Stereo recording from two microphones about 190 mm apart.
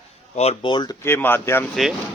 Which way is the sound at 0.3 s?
35° left (ahead or behind).